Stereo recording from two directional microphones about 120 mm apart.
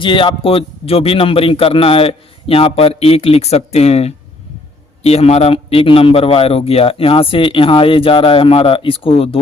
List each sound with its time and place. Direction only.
0.0 s a man's voice: 45° left (ahead or behind)